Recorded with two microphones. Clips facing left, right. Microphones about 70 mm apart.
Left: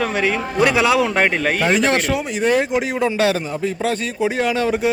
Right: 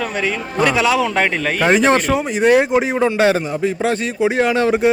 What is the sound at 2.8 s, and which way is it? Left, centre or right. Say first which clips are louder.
A man's voice: right 3 dB; right.